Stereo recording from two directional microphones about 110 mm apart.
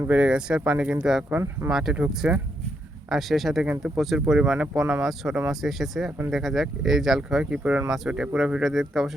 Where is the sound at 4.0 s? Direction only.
Centre (ahead or behind).